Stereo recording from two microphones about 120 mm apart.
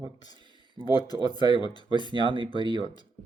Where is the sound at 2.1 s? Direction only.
45° right (ahead or behind).